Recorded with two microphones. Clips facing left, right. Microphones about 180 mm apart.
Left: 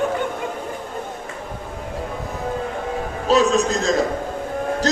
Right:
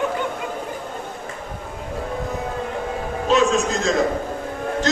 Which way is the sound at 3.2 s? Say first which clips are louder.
Left 1 dB; 35° left (ahead or behind).